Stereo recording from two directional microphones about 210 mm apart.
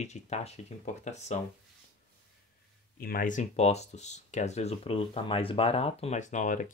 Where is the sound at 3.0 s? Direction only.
40° left (ahead or behind).